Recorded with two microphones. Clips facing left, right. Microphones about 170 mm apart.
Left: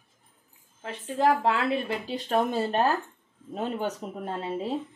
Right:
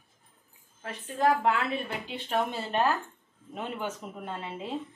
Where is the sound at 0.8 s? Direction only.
25° left (ahead or behind).